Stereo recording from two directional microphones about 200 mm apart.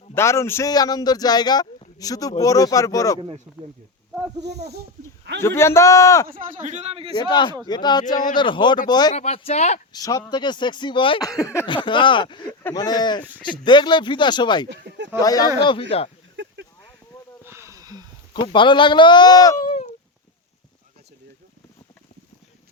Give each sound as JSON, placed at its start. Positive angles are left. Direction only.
{"t": 0.1, "sound": "a man's voice", "side_deg": 15}
{"t": 3.2, "sound": "speech", "side_deg": -30}
{"t": 4.4, "sound": "speech", "side_deg": -55}
{"t": 5.4, "sound": "a man's voice", "side_deg": 15}
{"t": 6.2, "sound": "speech", "side_deg": -45}
{"t": 7.2, "sound": "speech", "side_deg": 20}
{"t": 9.1, "sound": "speech", "side_deg": 30}
{"t": 9.9, "sound": "speech", "side_deg": 20}
{"t": 14.7, "sound": "a sound", "side_deg": -60}
{"t": 15.2, "sound": "speech", "side_deg": 20}
{"t": 16.3, "sound": "a sound", "side_deg": -65}
{"t": 17.4, "sound": "a sound", "side_deg": -15}
{"t": 18.3, "sound": "speech", "side_deg": 25}